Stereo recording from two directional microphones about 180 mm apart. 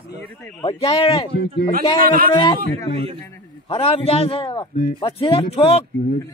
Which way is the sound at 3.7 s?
35° left (ahead or behind).